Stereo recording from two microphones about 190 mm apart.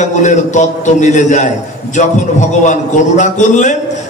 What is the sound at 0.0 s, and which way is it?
A man's voice, 40° left (ahead or behind).